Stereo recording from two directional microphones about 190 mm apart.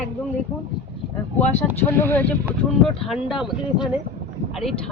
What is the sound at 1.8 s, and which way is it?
Speech, 10° left (ahead or behind).